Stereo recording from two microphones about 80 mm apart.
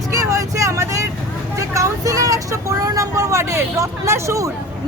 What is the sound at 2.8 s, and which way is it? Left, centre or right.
Speech, right.